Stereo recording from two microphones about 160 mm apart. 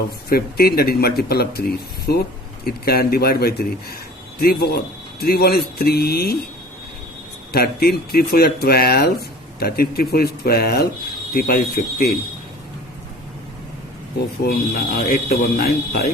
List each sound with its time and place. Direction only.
0.3 s speech: 70° left (ahead or behind)
2.1 s speech: 90° left
2.6 s speech: 75° left (ahead or behind)
7.5 s speech: 75° left (ahead or behind)
14.4 s speech: 75° left (ahead or behind)